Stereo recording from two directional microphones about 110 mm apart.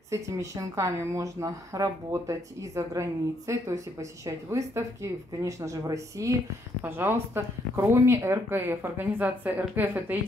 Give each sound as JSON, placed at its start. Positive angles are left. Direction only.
{"t": 0.1, "sound": "a woman's voice", "side_deg": -30}
{"t": 6.8, "sound": "a woman's voice", "side_deg": -20}